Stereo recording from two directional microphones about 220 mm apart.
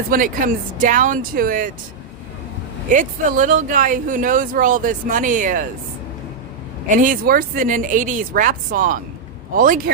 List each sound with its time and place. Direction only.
0.1 s speech: 40° right (ahead or behind)
2.9 s speech: 35° right (ahead or behind)
6.8 s speech: 35° right (ahead or behind)